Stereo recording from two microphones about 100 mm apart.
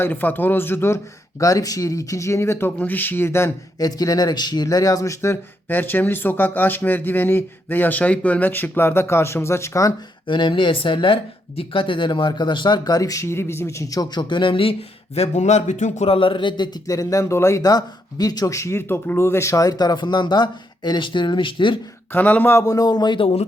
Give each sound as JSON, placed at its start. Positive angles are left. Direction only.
{"t": 0.0, "sound": "speech", "side_deg": 20}
{"t": 3.8, "sound": "speech", "side_deg": 40}
{"t": 10.2, "sound": "speech", "side_deg": 55}
{"t": 22.1, "sound": "speech", "side_deg": 15}
{"t": 22.5, "sound": "speech", "side_deg": 35}
{"t": 23.2, "sound": "speech", "side_deg": 90}